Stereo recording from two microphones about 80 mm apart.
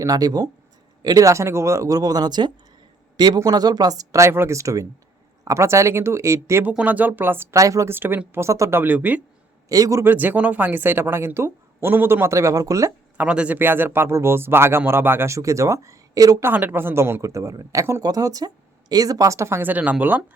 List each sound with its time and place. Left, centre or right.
0.0 s speech: right
1.3 s a man's voice: right
6.7 s speech: centre
7.5 s speech: right
7.9 s a man's voice: right
8.8 s speech: right
9.6 s speech: right
10.0 s speech: right
13.1 s a man's voice: centre; by 16.4 s right
16.4 s a man's voice: right
18.0 s speech: right
19.6 s speech: centre